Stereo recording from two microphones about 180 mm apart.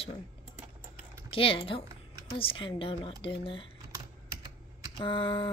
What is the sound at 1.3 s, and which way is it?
Speech, 30° left (ahead or behind).